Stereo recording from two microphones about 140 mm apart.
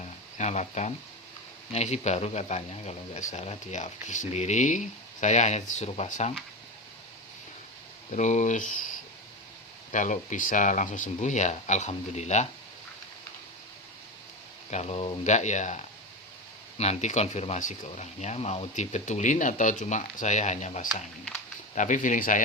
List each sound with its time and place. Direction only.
0.0 s a sound: 55° left (ahead or behind)
1.7 s speech: 55° left (ahead or behind)
8.1 s speech: 60° left (ahead or behind)
9.9 s speech: 65° left (ahead or behind)
14.7 s speech: 50° left (ahead or behind)
15.2 s speech: 55° left (ahead or behind)
20.8 s speech: centre (ahead or behind)
21.8 s speech: 65° left (ahead or behind)